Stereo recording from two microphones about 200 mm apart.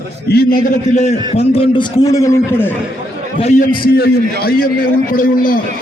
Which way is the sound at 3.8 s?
50° left (ahead or behind).